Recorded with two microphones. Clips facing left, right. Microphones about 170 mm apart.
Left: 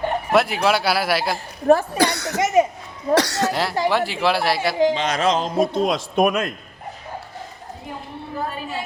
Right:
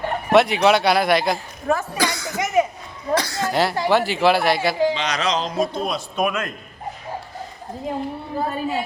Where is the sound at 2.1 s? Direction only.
70° left (ahead or behind).